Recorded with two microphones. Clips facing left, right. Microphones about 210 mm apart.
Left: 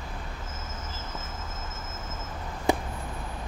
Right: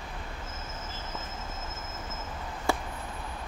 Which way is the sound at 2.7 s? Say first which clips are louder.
Left 4 dB; 20° left (ahead or behind).